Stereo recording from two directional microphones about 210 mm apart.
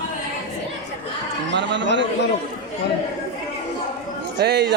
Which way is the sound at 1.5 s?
60° right (ahead or behind).